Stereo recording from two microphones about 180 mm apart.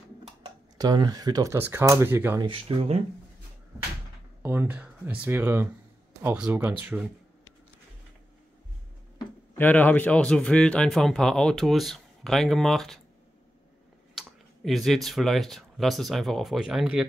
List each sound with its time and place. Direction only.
0.7 s speech: 25° right (ahead or behind)
2.4 s speech: 30° right (ahead or behind)
4.4 s speech: 10° right (ahead or behind)
9.6 s a man's voice: 10° left (ahead or behind)
14.1 s speech: centre (ahead or behind)